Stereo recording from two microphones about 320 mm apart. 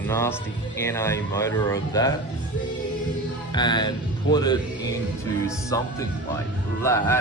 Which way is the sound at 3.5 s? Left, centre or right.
Centre.